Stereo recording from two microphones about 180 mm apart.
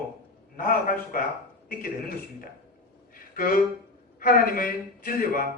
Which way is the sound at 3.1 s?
50° left (ahead or behind).